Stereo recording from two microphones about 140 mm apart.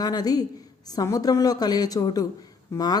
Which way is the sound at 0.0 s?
30° left (ahead or behind).